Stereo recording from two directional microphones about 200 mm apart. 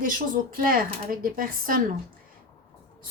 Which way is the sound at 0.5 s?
45° right (ahead or behind).